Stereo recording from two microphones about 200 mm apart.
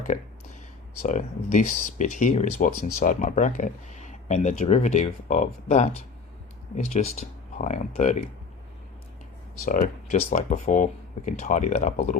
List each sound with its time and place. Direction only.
1.0 s speech: 40° left (ahead or behind)
9.6 s speech: 40° left (ahead or behind)